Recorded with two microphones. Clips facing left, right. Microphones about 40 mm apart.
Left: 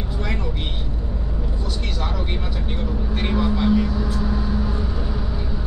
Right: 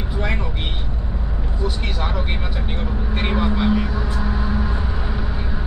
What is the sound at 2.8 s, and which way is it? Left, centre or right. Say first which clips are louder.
Vehicle: right 1 dB; right.